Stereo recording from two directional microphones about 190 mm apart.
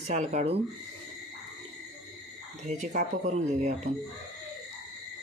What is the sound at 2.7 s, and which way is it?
Speech, 40° right (ahead or behind).